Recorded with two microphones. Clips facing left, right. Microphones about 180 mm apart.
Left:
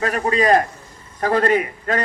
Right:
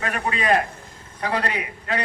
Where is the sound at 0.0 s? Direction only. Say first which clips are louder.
Left 7 dB; 35° left (ahead or behind).